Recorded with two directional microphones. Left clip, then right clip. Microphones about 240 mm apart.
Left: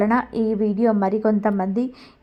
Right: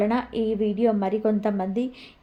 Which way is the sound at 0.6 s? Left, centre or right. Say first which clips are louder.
Left 3 dB; centre.